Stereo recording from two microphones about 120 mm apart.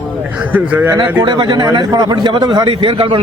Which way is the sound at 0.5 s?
10° right (ahead or behind).